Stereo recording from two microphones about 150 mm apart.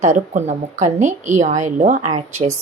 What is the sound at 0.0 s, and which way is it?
A woman's voice, 50° right (ahead or behind).